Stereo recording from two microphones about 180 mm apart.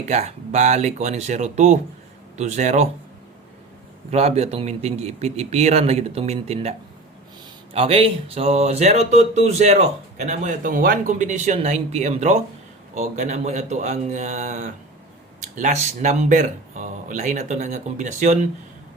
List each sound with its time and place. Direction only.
0.0 s speech: 40° right (ahead or behind)
4.1 s speech: 35° right (ahead or behind)